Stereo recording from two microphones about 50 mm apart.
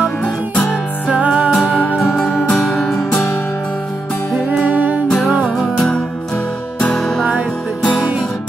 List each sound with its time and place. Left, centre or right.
1.0 s music: right
2.8 s music: centre
4.6 s music: right
5.8 s music: centre